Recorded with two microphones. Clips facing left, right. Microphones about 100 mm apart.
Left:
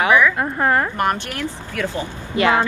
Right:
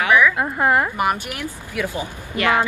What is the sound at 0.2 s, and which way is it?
A woman's voice, 5° right (ahead or behind).